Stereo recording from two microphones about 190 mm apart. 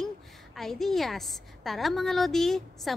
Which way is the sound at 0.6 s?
Centre (ahead or behind).